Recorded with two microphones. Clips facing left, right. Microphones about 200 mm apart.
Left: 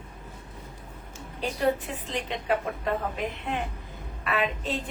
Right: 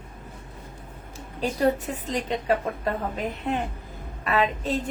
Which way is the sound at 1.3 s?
40° right (ahead or behind).